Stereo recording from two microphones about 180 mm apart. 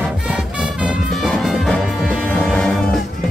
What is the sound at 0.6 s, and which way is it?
Music, 5° right (ahead or behind).